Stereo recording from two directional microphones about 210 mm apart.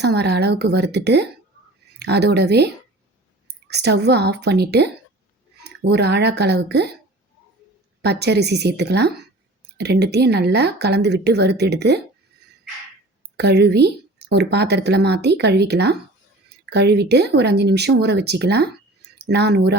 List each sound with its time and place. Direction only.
0.0 s a woman's voice: 50° right (ahead or behind)
8.0 s speech: 50° right (ahead or behind)
13.3 s speech: 50° right (ahead or behind)